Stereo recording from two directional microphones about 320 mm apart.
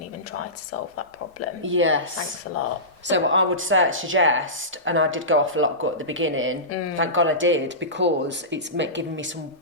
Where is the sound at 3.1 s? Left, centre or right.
Right.